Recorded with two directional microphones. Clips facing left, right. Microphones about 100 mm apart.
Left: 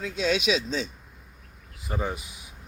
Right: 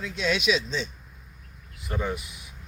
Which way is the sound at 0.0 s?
35° left (ahead or behind).